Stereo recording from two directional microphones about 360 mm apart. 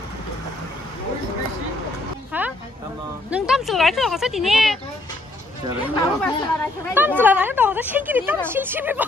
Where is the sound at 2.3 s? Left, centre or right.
Centre.